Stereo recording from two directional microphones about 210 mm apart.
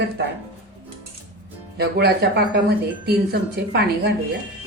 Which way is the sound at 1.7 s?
50° right (ahead or behind).